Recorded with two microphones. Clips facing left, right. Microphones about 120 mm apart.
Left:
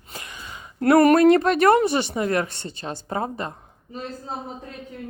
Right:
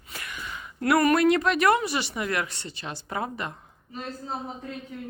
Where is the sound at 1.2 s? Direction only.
45° left (ahead or behind).